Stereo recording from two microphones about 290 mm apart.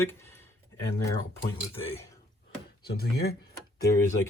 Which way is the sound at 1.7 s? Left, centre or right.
Centre.